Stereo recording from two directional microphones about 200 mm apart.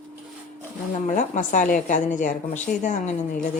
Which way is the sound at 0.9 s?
40° left (ahead or behind).